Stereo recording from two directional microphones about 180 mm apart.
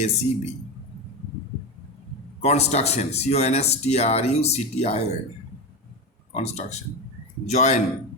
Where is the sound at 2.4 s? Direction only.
35° left (ahead or behind).